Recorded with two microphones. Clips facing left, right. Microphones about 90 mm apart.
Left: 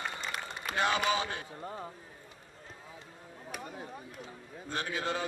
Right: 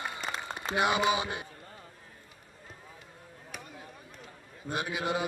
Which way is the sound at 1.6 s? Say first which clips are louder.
Left 9 dB; 40° left (ahead or behind).